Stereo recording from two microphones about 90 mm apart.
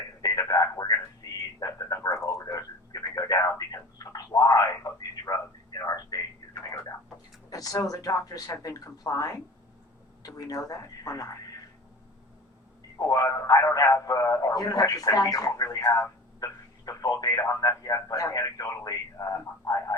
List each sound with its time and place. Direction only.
0.2 s radio: 45° left (ahead or behind)
4.3 s a sound: 40° left (ahead or behind)
7.5 s a man's voice: 40° left (ahead or behind)
13.0 s a man's voice: 40° left (ahead or behind)
16.4 s a sound: 40° left (ahead or behind)
17.5 s a man's voice: 40° left (ahead or behind)